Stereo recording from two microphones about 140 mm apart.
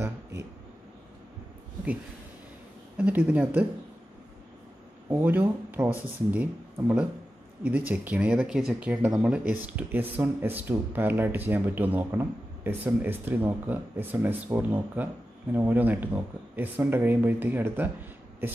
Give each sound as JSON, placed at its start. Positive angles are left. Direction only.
{"t": 0.0, "sound": "speech", "side_deg": -20}
{"t": 3.0, "sound": "speech", "side_deg": -10}
{"t": 5.2, "sound": "speech", "side_deg": -15}